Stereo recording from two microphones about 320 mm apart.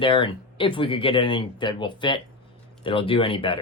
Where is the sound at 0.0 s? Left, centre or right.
Centre.